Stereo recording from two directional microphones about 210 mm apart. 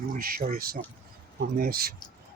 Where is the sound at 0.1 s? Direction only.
45° right (ahead or behind).